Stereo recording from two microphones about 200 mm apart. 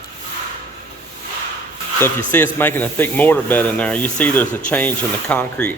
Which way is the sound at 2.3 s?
10° left (ahead or behind).